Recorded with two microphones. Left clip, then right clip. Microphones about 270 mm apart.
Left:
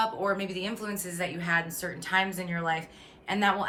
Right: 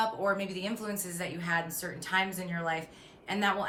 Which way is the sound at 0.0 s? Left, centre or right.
Centre.